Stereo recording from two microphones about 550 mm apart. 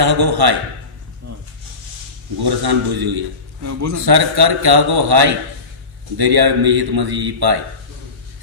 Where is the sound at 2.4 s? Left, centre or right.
Right.